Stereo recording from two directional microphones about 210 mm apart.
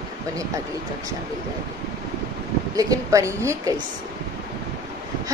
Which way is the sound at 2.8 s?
15° right (ahead or behind).